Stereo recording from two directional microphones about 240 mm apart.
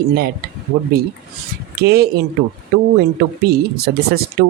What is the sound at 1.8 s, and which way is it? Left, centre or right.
Speech, right.